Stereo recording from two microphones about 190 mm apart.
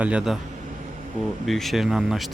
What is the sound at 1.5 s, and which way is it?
Speech, centre (ahead or behind).